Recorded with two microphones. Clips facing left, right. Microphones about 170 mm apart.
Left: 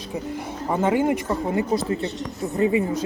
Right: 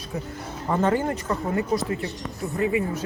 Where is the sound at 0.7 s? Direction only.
10° left (ahead or behind); by 2.8 s 25° left (ahead or behind).